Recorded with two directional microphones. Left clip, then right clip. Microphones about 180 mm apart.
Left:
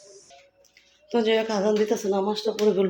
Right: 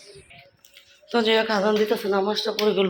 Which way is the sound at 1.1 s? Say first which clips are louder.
Right 2 dB; 15° left (ahead or behind).